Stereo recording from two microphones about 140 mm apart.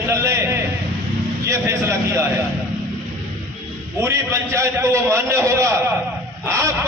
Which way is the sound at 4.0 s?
20° right (ahead or behind).